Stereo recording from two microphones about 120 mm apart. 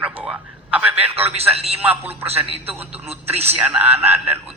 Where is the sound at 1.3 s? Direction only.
60° right (ahead or behind).